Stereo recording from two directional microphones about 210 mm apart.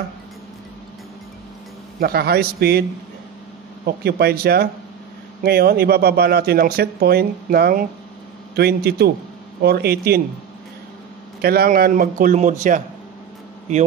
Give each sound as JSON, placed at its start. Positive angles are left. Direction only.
{"t": 2.0, "sound": "speech", "side_deg": -45}
{"t": 3.8, "sound": "speech", "side_deg": -50}
{"t": 11.4, "sound": "a man's voice", "side_deg": -45}